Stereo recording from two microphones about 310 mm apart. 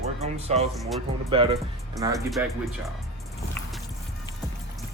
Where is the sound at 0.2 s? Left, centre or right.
Centre.